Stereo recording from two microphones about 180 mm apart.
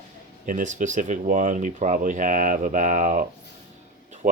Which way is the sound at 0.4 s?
45° right (ahead or behind).